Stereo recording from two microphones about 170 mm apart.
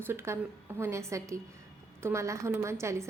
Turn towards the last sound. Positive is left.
turn(degrees=-15)  # may be behind; listen again after turning